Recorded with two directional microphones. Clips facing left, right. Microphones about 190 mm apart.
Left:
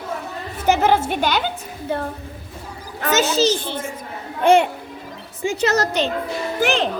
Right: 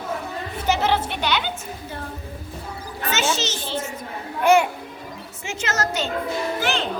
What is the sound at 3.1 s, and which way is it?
Speech, 40° left (ahead or behind).